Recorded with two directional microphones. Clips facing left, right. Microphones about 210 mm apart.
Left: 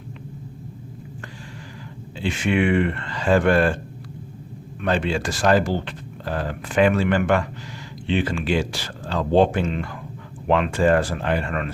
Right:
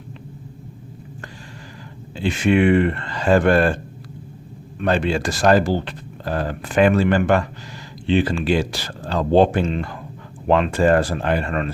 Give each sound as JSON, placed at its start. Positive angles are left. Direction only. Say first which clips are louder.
{"t": 2.2, "sound": "speech", "louder": "right 4 dB", "side_deg": -40}
{"t": 4.8, "sound": "speech", "louder": "right 3 dB", "side_deg": -40}